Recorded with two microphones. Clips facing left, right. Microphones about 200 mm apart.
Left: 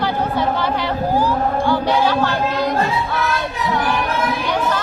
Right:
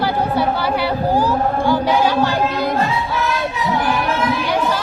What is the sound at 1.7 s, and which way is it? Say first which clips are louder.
Choir: right 1 dB; 10° right (ahead or behind).